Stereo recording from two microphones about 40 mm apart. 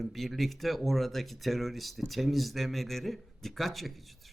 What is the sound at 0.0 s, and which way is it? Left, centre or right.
A man's voice, centre.